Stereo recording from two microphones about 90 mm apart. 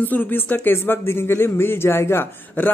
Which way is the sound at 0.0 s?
20° left (ahead or behind).